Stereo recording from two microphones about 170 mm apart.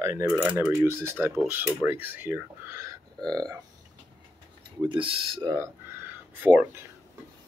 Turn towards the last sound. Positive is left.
turn(degrees=-10)  # may be behind; listen again after turning